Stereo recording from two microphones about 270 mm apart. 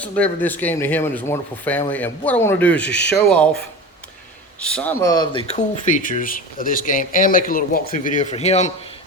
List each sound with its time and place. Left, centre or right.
0.0 s speech: centre
4.6 s speech: centre; by 8.7 s left